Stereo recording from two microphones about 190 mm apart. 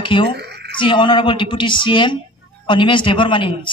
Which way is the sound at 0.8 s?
25° left (ahead or behind).